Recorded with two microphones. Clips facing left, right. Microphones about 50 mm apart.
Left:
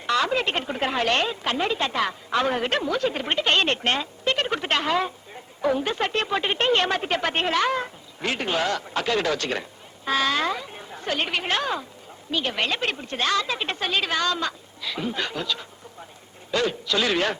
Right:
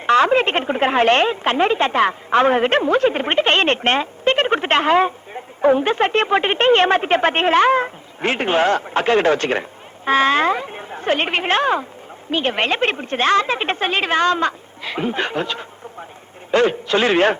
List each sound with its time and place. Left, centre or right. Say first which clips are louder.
0.0 s a woman's voice: right 9 dB; right